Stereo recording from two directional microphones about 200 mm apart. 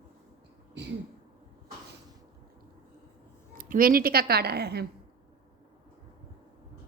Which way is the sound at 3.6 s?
45° right (ahead or behind).